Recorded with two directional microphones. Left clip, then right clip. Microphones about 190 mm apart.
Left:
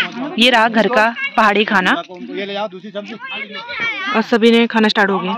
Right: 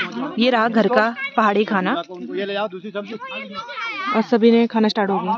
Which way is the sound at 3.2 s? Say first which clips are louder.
Left 4 dB; 70° right (ahead or behind).